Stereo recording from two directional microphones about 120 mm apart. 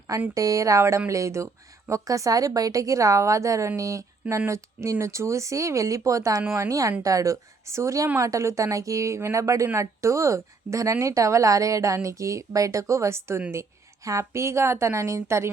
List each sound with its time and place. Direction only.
0.3 s a woman's voice: 25° right (ahead or behind)